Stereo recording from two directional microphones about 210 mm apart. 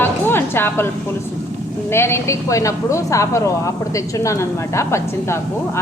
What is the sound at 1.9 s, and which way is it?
A woman's voice, 10° left (ahead or behind).